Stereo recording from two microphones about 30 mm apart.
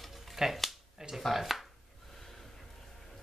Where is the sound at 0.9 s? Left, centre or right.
Centre.